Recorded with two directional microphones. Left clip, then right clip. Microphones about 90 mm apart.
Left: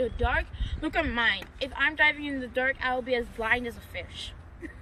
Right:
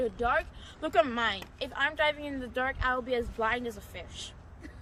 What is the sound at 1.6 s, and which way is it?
A woman's voice, 70° right (ahead or behind).